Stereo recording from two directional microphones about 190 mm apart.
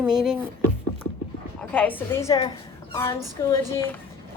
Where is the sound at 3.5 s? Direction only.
15° left (ahead or behind).